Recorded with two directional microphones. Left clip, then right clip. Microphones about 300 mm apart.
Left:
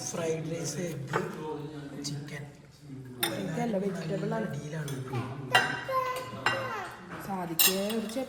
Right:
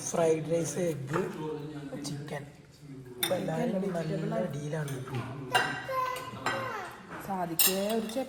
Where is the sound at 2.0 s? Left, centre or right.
Centre.